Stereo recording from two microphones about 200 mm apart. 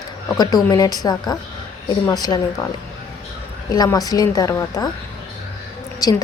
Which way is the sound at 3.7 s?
20° left (ahead or behind).